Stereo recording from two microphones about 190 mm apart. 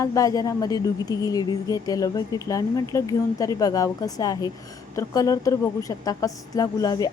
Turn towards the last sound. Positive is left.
turn(degrees=20)  # may be behind; listen again after turning